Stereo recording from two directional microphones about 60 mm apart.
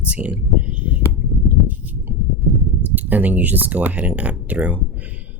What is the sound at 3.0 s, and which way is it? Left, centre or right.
Speech, right.